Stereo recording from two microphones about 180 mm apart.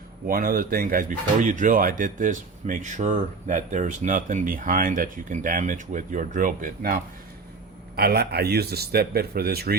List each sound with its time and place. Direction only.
0.3 s speech: 55° right (ahead or behind)